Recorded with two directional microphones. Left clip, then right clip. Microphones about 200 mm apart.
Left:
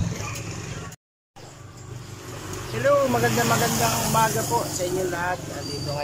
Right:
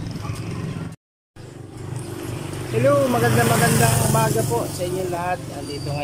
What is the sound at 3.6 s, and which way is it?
Speech, 50° right (ahead or behind).